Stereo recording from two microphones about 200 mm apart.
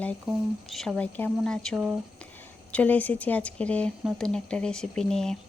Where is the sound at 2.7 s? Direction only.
5° left (ahead or behind).